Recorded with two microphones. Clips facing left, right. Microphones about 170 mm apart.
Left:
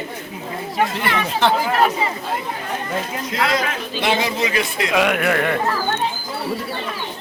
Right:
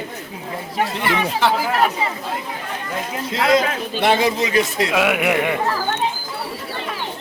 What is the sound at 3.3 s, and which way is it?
Speech, 25° right (ahead or behind).